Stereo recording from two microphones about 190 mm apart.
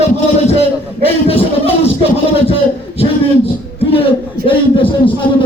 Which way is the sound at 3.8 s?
30° left (ahead or behind).